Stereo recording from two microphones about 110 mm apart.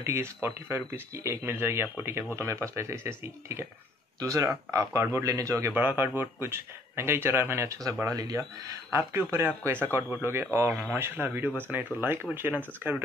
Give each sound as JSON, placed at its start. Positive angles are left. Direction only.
{"t": 0.0, "sound": "speech", "side_deg": -25}